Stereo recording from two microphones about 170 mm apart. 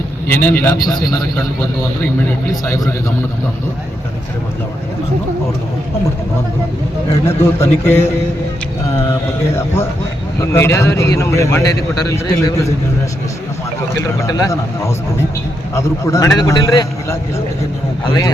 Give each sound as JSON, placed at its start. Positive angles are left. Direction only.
{"t": 0.3, "sound": "a man's voice", "side_deg": 15}
{"t": 2.6, "sound": "a man's voice", "side_deg": 20}
{"t": 7.3, "sound": "a man's voice", "side_deg": 15}
{"t": 10.5, "sound": "a man's voice", "side_deg": 15}
{"t": 14.0, "sound": "a man's voice", "side_deg": 20}